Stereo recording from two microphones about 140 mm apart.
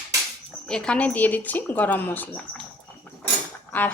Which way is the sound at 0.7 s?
5° left (ahead or behind).